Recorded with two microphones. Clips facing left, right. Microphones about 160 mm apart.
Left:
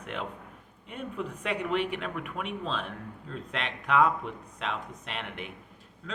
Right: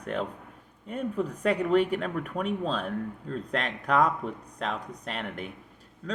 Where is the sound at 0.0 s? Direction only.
40° right (ahead or behind).